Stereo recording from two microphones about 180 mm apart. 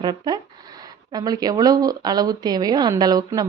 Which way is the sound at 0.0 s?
25° right (ahead or behind).